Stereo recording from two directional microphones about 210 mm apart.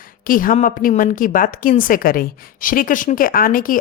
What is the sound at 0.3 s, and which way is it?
A woman's voice, 40° left (ahead or behind).